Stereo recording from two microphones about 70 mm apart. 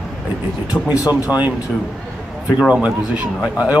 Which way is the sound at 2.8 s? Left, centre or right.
Centre.